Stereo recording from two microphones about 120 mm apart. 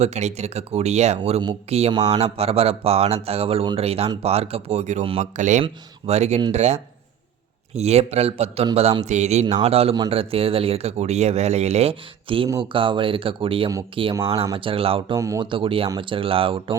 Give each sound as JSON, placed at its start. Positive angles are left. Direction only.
{"t": 0.0, "sound": "speech", "side_deg": -70}
{"t": 1.9, "sound": "speech", "side_deg": -30}
{"t": 2.1, "sound": "speech", "side_deg": -55}
{"t": 5.2, "sound": "speech", "side_deg": -90}
{"t": 6.1, "sound": "speech", "side_deg": -65}
{"t": 9.0, "sound": "speech", "side_deg": -70}
{"t": 9.6, "sound": "speech", "side_deg": -55}
{"t": 15.1, "sound": "speech", "side_deg": -25}
{"t": 15.4, "sound": "speech", "side_deg": -45}